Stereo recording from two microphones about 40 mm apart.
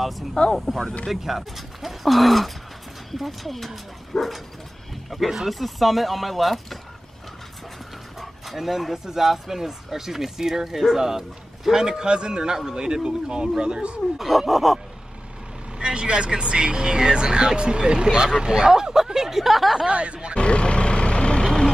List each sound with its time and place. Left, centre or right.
0.4 s speech: left
1.1 s speech: centre
8.2 s speech: centre; by 14.0 s right
14.1 s speech: centre
15.8 s speech: right; by 19.8 s centre
19.9 s speech: right
20.3 s vehicle: left